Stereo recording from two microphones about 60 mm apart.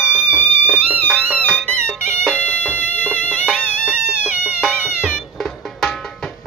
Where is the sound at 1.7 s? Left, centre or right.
Right.